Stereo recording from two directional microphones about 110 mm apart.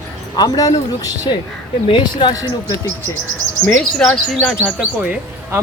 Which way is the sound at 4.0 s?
Centre (ahead or behind).